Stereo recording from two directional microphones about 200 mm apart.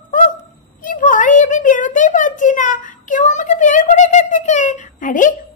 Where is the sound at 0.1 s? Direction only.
40° left (ahead or behind).